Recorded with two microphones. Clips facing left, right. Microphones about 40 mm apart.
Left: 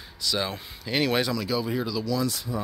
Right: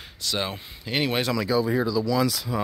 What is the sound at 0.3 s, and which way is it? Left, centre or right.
Speech, right.